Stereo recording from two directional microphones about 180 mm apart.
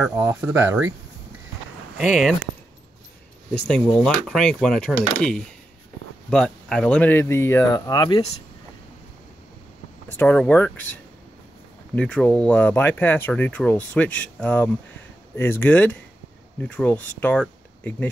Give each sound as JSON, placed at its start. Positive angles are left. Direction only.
{"t": 0.1, "sound": "speech", "side_deg": -20}
{"t": 2.0, "sound": "speech", "side_deg": 0}
{"t": 3.6, "sound": "speech", "side_deg": 5}
{"t": 6.3, "sound": "speech", "side_deg": 5}
{"t": 10.1, "sound": "speech", "side_deg": 5}